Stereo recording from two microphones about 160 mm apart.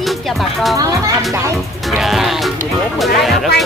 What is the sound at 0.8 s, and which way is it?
Speech, 20° right (ahead or behind).